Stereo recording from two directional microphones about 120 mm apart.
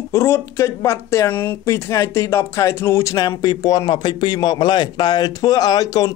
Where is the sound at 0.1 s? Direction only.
20° left (ahead or behind).